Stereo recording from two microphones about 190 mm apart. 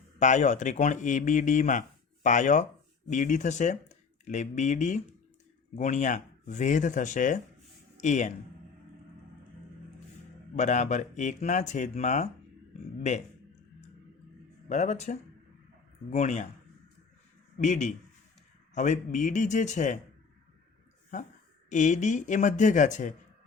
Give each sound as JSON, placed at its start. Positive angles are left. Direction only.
{"t": 0.2, "sound": "speech", "side_deg": 40}
{"t": 10.5, "sound": "speech", "side_deg": 40}
{"t": 14.7, "sound": "speech", "side_deg": 40}
{"t": 17.6, "sound": "speech", "side_deg": 40}
{"t": 21.1, "sound": "speech", "side_deg": 40}